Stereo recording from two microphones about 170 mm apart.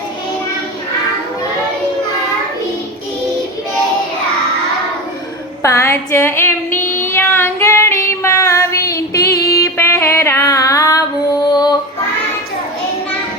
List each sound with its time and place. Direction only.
5.6 s female singing: 15° left (ahead or behind)
9.3 s music: 20° left (ahead or behind)
11.5 s female singing: 25° left (ahead or behind)